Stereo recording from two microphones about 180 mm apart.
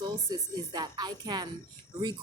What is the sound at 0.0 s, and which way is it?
A woman's voice, 25° right (ahead or behind).